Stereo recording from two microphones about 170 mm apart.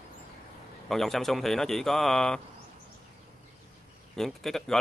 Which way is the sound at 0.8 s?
Centre (ahead or behind).